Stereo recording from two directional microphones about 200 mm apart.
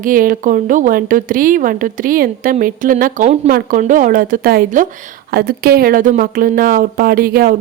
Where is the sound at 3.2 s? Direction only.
30° right (ahead or behind).